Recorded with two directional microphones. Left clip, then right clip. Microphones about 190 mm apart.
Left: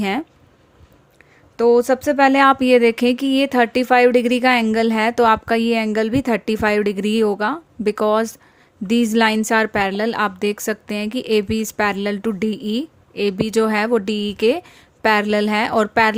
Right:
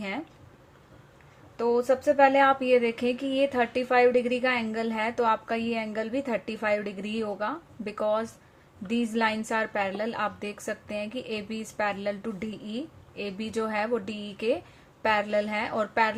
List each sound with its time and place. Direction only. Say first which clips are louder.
0.0 s speech: left 12 dB; 55° left (ahead or behind)
1.5 s speech: left 10 dB; 60° left (ahead or behind)